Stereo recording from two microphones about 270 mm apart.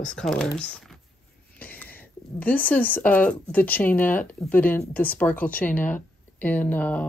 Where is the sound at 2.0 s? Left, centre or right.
Centre.